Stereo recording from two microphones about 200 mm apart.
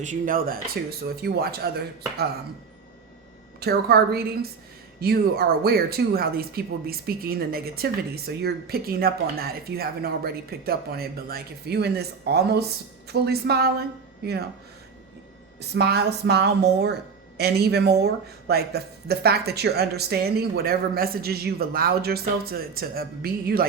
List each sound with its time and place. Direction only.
0.0 s speech: 40° right (ahead or behind)
3.6 s speech: 50° right (ahead or behind)
15.7 s a woman's voice: 55° right (ahead or behind)